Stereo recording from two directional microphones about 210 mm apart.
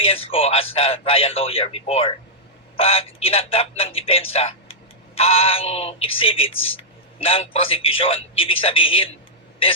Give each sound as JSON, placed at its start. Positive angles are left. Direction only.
{"t": 0.0, "sound": "a man's voice", "side_deg": 25}